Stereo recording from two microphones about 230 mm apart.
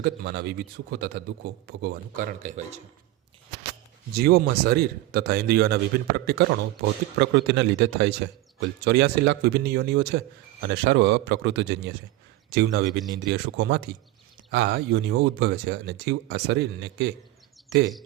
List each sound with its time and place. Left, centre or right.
0.0 s a man's voice: right
4.1 s a man's voice: right